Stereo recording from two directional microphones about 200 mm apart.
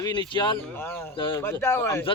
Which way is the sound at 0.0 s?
20° left (ahead or behind).